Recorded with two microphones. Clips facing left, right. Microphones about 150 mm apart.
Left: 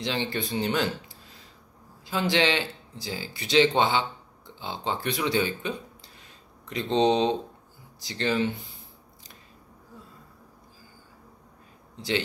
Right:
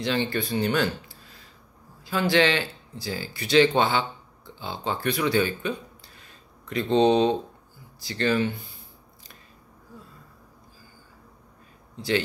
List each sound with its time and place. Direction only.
0.0 s speech: 20° left (ahead or behind)
2.0 s speech: 20° left (ahead or behind)